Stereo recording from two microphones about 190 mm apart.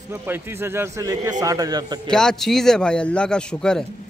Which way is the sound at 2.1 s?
5° left (ahead or behind).